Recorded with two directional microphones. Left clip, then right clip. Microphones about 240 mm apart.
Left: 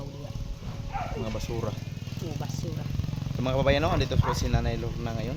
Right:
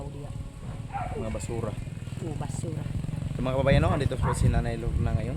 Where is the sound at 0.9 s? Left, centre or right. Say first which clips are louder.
Even; left.